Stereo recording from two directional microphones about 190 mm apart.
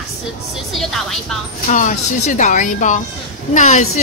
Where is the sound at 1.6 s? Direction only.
40° left (ahead or behind).